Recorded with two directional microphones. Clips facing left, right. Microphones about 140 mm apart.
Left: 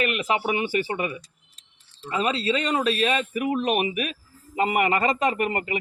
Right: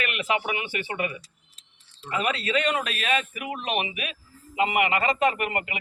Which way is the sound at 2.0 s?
30° left (ahead or behind).